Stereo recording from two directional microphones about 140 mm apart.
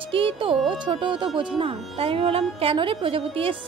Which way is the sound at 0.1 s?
40° right (ahead or behind).